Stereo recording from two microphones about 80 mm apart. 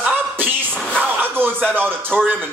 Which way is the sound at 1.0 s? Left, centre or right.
Right.